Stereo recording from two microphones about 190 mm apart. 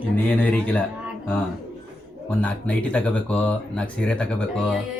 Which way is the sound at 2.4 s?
5° left (ahead or behind).